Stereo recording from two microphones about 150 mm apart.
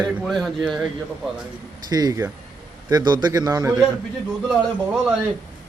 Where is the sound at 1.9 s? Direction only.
25° right (ahead or behind).